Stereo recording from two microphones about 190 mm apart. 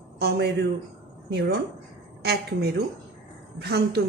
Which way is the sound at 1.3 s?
60° right (ahead or behind).